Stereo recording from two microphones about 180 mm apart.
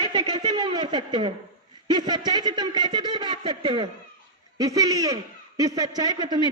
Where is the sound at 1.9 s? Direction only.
25° right (ahead or behind).